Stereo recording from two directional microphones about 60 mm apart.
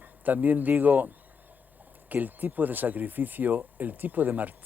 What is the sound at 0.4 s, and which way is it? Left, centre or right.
Speech, right.